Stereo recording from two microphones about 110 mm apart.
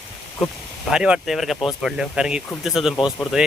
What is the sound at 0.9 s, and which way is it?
Speech, 5° right (ahead or behind).